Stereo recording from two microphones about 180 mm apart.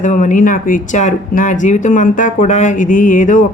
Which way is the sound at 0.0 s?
45° left (ahead or behind).